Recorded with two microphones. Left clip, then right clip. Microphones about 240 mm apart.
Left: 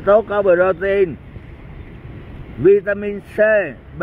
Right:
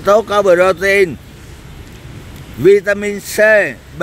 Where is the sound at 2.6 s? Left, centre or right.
Right.